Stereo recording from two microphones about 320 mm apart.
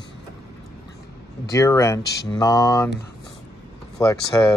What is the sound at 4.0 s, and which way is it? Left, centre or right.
Speech, centre.